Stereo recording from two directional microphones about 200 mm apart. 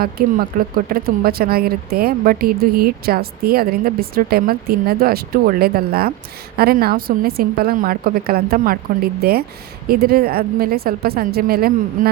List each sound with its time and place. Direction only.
0.0 s speech: 50° right (ahead or behind)